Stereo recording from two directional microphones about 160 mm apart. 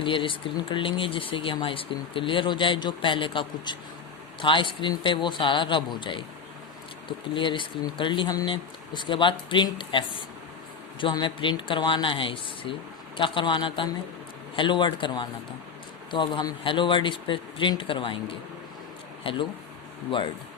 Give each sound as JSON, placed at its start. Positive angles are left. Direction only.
{"t": 0.0, "sound": "speech", "side_deg": 30}
{"t": 7.3, "sound": "speech", "side_deg": 30}
{"t": 11.0, "sound": "a man's voice", "side_deg": 30}